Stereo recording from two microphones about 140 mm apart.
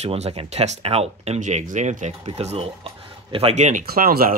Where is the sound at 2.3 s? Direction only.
45° right (ahead or behind).